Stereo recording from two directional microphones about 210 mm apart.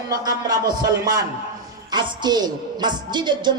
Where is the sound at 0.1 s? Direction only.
20° right (ahead or behind).